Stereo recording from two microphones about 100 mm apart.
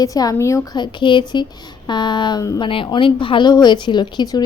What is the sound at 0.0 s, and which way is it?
Speech, 35° left (ahead or behind).